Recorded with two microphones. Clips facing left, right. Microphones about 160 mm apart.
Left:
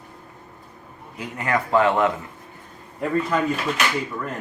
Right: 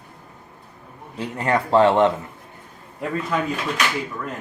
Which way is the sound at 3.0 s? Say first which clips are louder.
Left 2 dB; centre (ahead or behind).